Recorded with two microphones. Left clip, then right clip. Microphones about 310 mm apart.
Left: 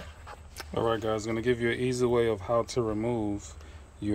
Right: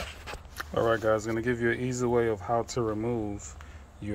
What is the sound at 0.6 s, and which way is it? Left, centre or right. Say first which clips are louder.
Speech: right 2 dB; centre.